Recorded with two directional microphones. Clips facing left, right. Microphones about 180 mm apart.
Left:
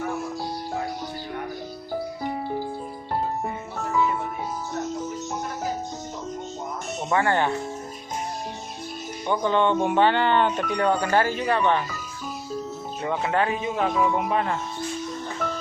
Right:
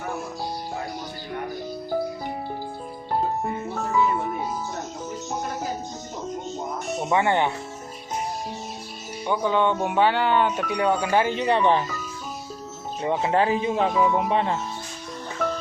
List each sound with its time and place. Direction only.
7.0 s speech: 15° right (ahead or behind)
9.2 s speech: 5° right (ahead or behind); by 11.9 s 30° right (ahead or behind)
13.0 s speech: 30° right (ahead or behind)